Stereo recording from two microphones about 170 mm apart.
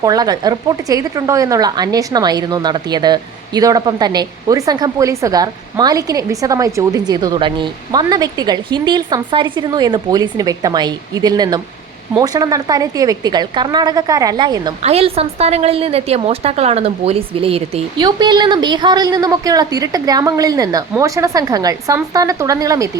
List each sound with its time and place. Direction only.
0.0 s speech: 20° right (ahead or behind)
14.8 s a woman's voice: 35° right (ahead or behind); by 22.9 s 20° right (ahead or behind)